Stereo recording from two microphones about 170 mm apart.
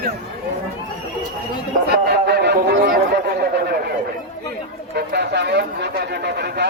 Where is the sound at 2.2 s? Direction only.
75° right (ahead or behind).